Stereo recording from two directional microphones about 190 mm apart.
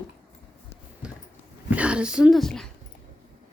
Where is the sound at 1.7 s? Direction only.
5° right (ahead or behind).